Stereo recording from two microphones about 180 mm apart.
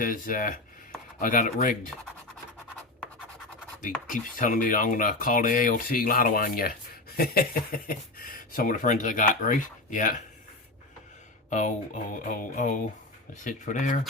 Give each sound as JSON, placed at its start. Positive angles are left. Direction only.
{"t": 0.0, "sound": "speech", "side_deg": 50}
{"t": 3.8, "sound": "speech", "side_deg": 45}
{"t": 11.4, "sound": "speech", "side_deg": 40}